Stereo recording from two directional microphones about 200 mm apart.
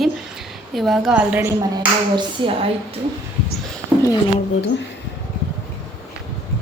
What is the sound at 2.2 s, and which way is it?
Speech, 25° right (ahead or behind).